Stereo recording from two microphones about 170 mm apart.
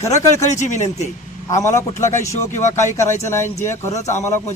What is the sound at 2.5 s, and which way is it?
Speech, 45° left (ahead or behind).